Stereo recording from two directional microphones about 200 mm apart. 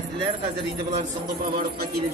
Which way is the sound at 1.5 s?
50° right (ahead or behind).